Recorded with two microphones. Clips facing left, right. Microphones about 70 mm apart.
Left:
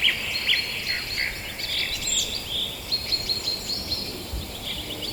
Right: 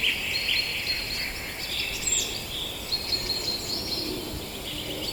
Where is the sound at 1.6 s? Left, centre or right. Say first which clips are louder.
Left 2 dB; left.